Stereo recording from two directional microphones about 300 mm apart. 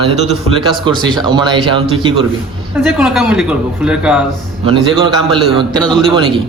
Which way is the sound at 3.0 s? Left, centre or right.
Centre.